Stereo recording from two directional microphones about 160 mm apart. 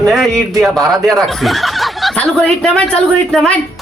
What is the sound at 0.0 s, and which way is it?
A man's voice, centre (ahead or behind).